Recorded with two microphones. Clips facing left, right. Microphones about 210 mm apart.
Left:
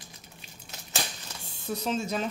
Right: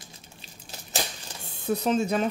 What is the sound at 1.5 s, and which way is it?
Speech, 55° right (ahead or behind).